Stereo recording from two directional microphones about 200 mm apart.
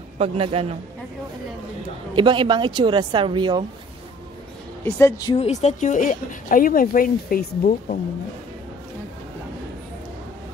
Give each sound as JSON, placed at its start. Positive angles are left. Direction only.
{"t": 0.2, "sound": "speech", "side_deg": -30}
{"t": 2.1, "sound": "speech", "side_deg": -25}
{"t": 4.8, "sound": "a woman's voice", "side_deg": 10}
{"t": 5.4, "sound": "speech", "side_deg": 35}